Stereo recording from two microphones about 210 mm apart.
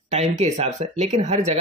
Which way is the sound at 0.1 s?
30° right (ahead or behind).